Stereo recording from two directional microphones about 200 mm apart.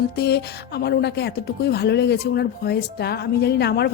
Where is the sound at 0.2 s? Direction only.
55° left (ahead or behind).